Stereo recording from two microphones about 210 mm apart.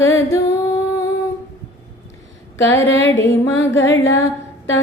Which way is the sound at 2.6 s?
60° left (ahead or behind).